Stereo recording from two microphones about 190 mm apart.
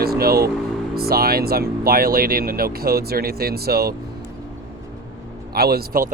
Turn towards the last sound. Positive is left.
turn(degrees=-50)  # may be behind; listen again after turning